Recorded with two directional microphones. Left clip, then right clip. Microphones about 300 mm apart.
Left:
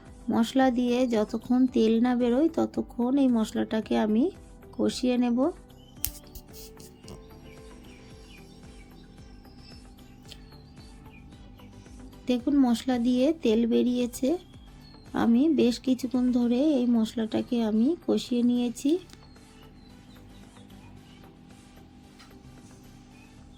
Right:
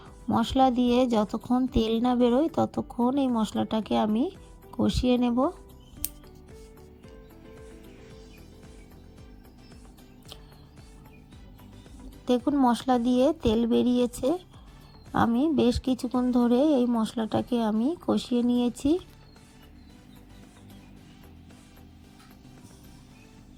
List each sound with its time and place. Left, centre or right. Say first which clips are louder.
0.3 s speech: right 2 dB; right
12.2 s speech: right 2 dB; centre